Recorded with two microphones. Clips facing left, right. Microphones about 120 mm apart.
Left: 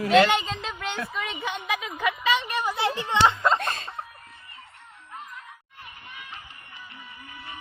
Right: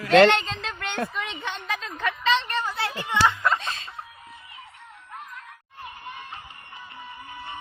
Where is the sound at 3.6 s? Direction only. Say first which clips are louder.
Left 4 dB; 50° left (ahead or behind).